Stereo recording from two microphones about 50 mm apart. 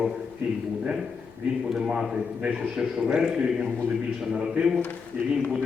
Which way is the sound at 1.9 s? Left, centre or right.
Centre.